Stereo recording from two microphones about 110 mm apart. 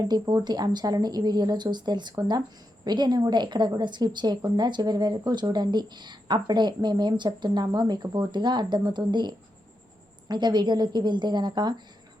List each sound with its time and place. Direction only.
0.0 s a woman's voice: 40° right (ahead or behind)